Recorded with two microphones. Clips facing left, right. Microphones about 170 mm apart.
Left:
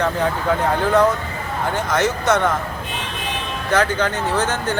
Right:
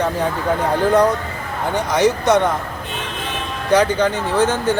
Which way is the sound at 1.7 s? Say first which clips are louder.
Right 5 dB; 15° right (ahead or behind).